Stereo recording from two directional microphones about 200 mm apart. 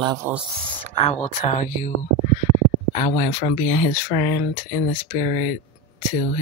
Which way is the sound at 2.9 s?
35° left (ahead or behind).